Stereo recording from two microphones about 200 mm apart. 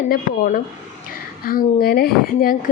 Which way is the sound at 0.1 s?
45° left (ahead or behind).